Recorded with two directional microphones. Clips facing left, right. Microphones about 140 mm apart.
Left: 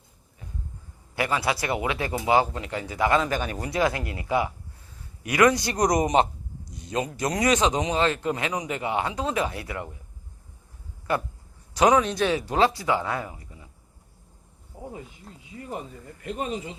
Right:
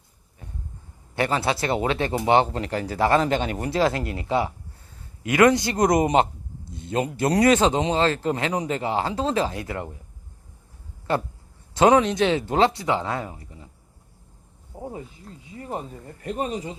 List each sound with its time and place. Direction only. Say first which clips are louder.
1.1 s a man's voice: right 2 dB; 30° right (ahead or behind)
6.7 s a sound: right 3 dB; 30° right (ahead or behind)
7.2 s a man's voice: right 5 dB; 30° right (ahead or behind)
11.1 s a man's voice: right 2 dB; 25° right (ahead or behind)
14.7 s a man's voice: right 4 dB; 40° right (ahead or behind)